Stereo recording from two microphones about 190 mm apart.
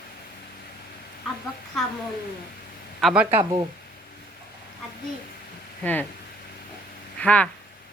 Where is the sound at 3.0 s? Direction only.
Centre (ahead or behind).